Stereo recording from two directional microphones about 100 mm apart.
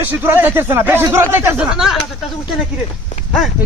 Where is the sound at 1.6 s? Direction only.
5° right (ahead or behind).